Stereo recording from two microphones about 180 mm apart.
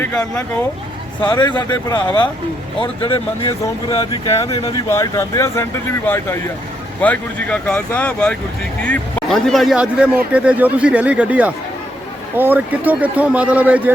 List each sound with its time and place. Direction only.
0.0 s speech: 10° left (ahead or behind)
1.2 s speech: 25° left (ahead or behind)
4.9 s a man's voice: 15° left (ahead or behind); by 13.9 s 10° right (ahead or behind)